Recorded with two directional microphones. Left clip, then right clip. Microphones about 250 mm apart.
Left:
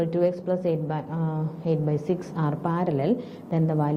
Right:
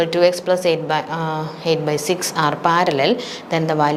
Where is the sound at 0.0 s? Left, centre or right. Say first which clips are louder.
Right 9 dB; centre.